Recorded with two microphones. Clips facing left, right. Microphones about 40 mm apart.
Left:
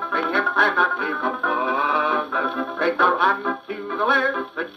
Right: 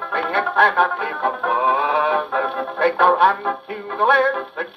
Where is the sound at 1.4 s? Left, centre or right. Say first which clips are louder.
Right 3 dB; centre.